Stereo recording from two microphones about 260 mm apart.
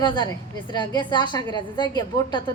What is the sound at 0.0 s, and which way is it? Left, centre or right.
A woman's voice, centre.